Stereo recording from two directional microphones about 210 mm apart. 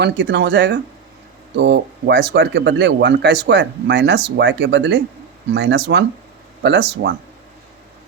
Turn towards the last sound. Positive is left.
turn(degrees=-55)  # may be behind; listen again after turning